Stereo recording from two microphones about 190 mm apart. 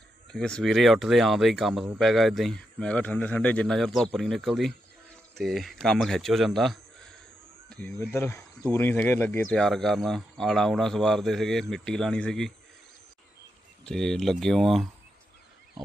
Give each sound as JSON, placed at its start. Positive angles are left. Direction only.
{"t": 0.3, "sound": "a man's voice", "side_deg": 5}
{"t": 7.9, "sound": "speech", "side_deg": 15}
{"t": 13.8, "sound": "speech", "side_deg": 5}